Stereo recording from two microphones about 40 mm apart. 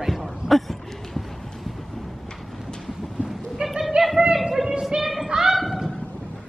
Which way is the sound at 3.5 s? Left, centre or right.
Centre.